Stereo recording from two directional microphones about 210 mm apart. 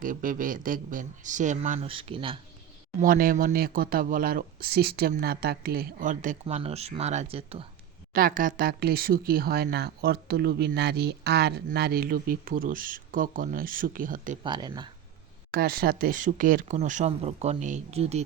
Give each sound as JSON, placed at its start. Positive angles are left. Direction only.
{"t": 0.0, "sound": "speech", "side_deg": -40}
{"t": 3.0, "sound": "speech", "side_deg": -45}
{"t": 8.1, "sound": "speech", "side_deg": -40}
{"t": 14.4, "sound": "speech", "side_deg": -20}
{"t": 15.5, "sound": "speech", "side_deg": -45}